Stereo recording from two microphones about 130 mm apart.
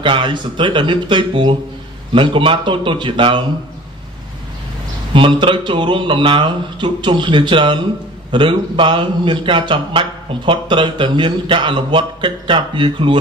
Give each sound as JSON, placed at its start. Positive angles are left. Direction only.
{"t": 0.0, "sound": "a man's voice", "side_deg": -40}
{"t": 5.1, "sound": "a man's voice", "side_deg": -40}